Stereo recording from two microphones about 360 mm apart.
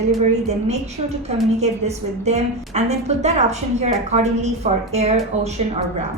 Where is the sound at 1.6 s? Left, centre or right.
Centre.